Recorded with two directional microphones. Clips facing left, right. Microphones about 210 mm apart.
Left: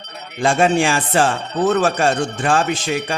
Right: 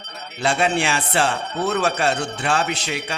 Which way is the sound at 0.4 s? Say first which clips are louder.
Left 5 dB; 50° left (ahead or behind).